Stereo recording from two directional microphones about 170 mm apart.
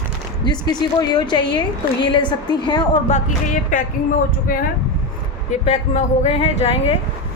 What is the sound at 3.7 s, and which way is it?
Speech, 55° left (ahead or behind).